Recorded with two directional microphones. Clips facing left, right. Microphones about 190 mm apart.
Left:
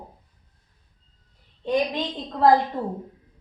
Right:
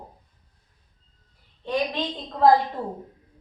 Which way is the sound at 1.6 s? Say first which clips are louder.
Left 3 dB; 20° left (ahead or behind).